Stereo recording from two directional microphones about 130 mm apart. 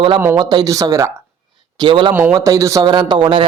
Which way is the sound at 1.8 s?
35° right (ahead or behind).